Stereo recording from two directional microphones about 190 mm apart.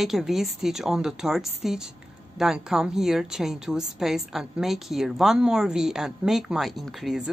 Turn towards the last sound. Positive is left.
turn(degrees=0)  # may be behind; listen again after turning